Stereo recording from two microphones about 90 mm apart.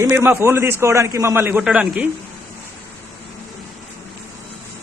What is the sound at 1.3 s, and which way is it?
Speech, 25° right (ahead or behind).